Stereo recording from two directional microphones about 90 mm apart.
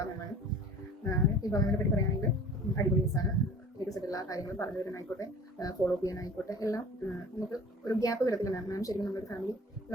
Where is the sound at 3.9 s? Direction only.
40° left (ahead or behind).